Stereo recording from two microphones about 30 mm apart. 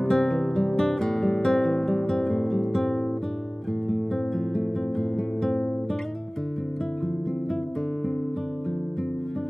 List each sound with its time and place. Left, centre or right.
0.0 s guitar: left
2.2 s music: centre
5.1 s music: centre